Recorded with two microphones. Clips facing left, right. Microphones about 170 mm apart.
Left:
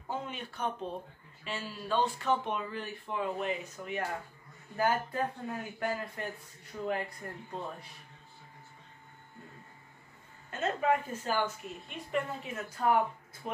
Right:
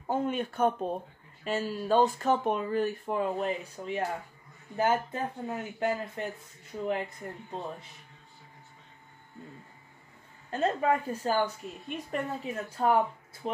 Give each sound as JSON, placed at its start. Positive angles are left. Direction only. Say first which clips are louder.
{"t": 0.0, "sound": "speech", "louder": "right 9 dB", "side_deg": -50}
{"t": 10.5, "sound": "a woman's voice", "louder": "right 3 dB", "side_deg": -35}